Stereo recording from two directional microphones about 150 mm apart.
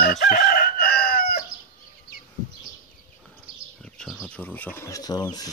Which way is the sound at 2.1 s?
90° left.